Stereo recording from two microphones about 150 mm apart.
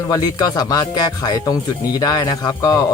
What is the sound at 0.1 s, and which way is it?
Speech, 25° left (ahead or behind).